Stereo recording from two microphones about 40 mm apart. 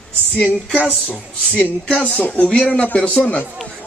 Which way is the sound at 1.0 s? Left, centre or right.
Left.